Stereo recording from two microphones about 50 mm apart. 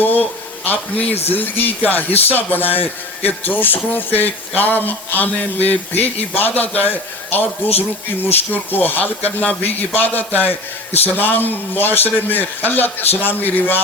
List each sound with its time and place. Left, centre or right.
0.0 s speech: left